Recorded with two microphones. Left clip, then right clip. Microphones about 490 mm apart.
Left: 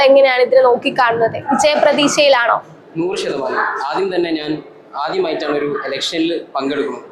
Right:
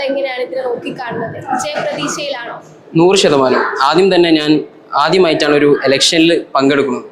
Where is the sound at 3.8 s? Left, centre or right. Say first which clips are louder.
Right 8 dB; right.